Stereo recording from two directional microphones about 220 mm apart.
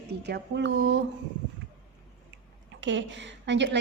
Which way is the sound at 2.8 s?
55° right (ahead or behind).